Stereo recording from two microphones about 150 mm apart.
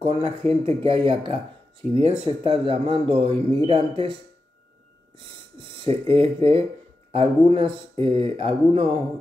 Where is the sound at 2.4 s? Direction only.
35° right (ahead or behind).